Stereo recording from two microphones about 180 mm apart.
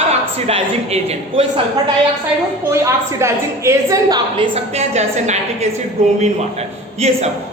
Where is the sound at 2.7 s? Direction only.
15° right (ahead or behind).